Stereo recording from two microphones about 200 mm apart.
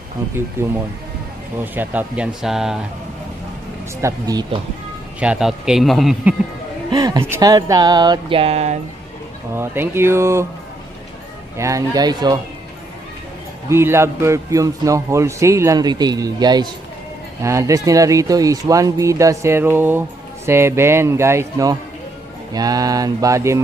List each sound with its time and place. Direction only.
0.6 s speech: 10° right (ahead or behind)
4.0 s speech: 20° right (ahead or behind)
5.2 s speech: 5° right (ahead or behind)
6.9 s speech: 20° right (ahead or behind)
9.6 s speech: 10° right (ahead or behind)
11.5 s speech: 15° right (ahead or behind)
13.7 s speech: 10° right (ahead or behind)